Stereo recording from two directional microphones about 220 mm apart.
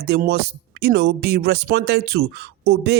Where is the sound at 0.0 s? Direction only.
45° right (ahead or behind).